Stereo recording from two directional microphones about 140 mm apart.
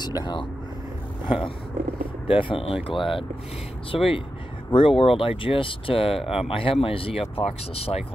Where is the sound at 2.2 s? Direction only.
40° left (ahead or behind).